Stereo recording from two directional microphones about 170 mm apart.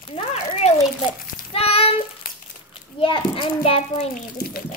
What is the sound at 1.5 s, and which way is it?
Child singing, 35° left (ahead or behind).